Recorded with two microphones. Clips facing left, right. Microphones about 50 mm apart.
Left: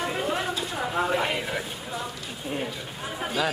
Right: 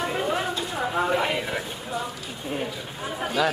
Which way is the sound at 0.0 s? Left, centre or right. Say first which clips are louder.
Right 2 dB; centre.